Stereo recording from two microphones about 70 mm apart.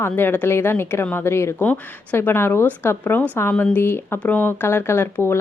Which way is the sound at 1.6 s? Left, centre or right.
Left.